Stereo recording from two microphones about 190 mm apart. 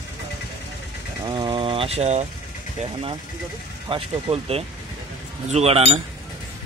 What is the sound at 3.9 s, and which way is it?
Speech, 30° right (ahead or behind).